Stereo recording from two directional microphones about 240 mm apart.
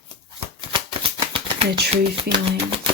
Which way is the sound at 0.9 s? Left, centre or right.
Right.